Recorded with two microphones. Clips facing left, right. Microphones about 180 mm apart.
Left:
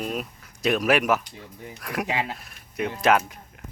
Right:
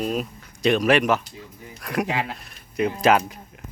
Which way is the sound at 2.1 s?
20° left (ahead or behind).